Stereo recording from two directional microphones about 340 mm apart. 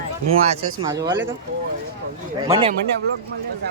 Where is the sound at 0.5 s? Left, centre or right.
Centre.